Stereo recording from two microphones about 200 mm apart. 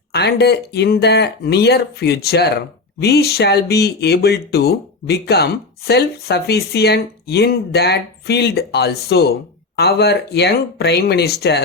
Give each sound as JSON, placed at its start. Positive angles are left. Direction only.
{"t": 0.1, "sound": "speech", "side_deg": 55}